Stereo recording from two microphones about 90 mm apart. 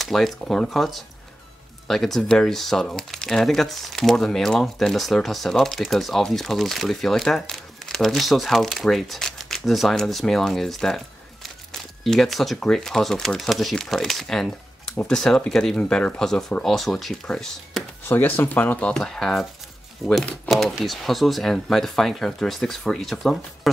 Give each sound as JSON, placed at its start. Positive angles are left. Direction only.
{"t": 0.0, "sound": "speech", "side_deg": 0}
{"t": 18.0, "sound": "speech", "side_deg": 20}
{"t": 18.9, "sound": "speech", "side_deg": 5}